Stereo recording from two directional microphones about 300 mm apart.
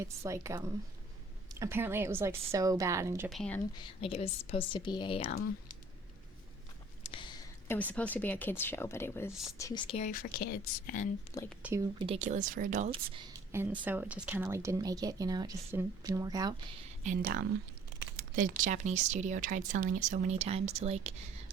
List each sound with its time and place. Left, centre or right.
0.0 s speech: centre
3.2 s speech: centre
3.8 s speech: centre
7.0 s a sound: centre
7.7 s speech: centre; by 11.1 s left
11.6 s speech: centre
17.0 s speech: right